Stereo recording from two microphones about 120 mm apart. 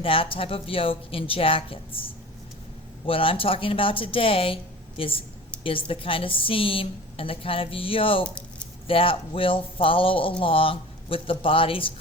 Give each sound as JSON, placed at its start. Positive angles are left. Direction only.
{"t": 0.0, "sound": "a woman's voice", "side_deg": 50}